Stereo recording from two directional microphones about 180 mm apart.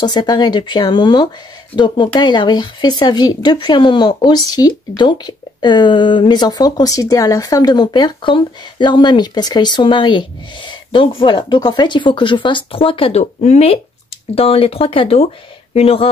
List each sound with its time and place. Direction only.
0.0 s speech: 25° left (ahead or behind)